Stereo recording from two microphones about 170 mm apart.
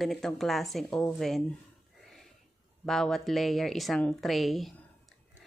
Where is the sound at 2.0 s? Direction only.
Centre (ahead or behind).